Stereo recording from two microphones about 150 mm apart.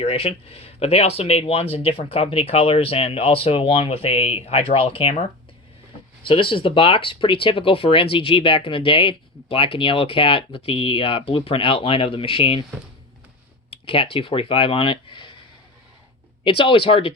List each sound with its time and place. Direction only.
0.0 s speech: 40° left (ahead or behind)
6.2 s speech: 35° left (ahead or behind)
13.7 s speech: 35° left (ahead or behind)
16.4 s speech: 35° left (ahead or behind)